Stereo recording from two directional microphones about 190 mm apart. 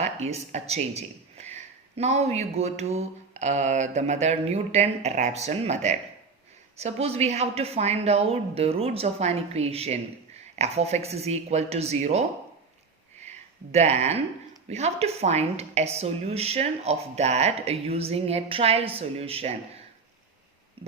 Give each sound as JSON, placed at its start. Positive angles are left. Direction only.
{"t": 0.0, "sound": "speech", "side_deg": -35}
{"t": 13.1, "sound": "a sound", "side_deg": -35}
{"t": 14.7, "sound": "speech", "side_deg": -35}